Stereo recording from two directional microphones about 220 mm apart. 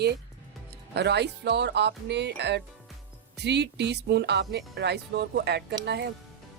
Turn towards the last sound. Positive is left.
turn(degrees=-50)  # may be behind; listen again after turning